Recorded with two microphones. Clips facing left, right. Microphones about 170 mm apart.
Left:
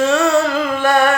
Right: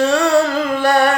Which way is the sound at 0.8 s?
35° right (ahead or behind).